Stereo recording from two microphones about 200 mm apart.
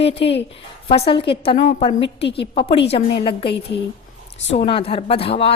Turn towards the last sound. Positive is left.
turn(degrees=30)  # may be behind; listen again after turning